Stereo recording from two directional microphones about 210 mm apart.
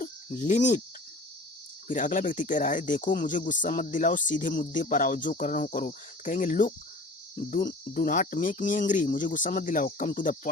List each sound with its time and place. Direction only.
0.0 s cricket: 35° left (ahead or behind)
1.9 s speech: 40° left (ahead or behind)